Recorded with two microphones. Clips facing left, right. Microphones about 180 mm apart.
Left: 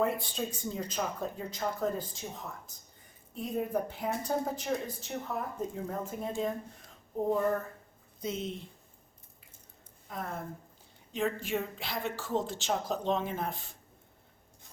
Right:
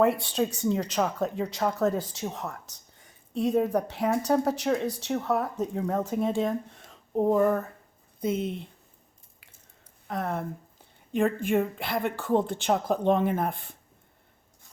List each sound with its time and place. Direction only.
0.0 s speech: 70° right (ahead or behind)
8.2 s a woman's voice: 55° right (ahead or behind)
10.1 s speech: 75° right (ahead or behind)
11.1 s a woman's voice: 55° right (ahead or behind)